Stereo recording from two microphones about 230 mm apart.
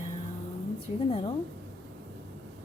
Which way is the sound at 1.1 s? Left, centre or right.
Left.